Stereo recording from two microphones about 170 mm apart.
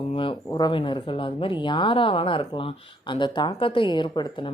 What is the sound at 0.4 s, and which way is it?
Speech, 25° left (ahead or behind).